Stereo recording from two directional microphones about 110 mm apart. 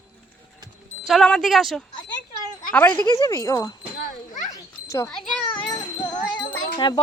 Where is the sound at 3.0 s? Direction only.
40° right (ahead or behind).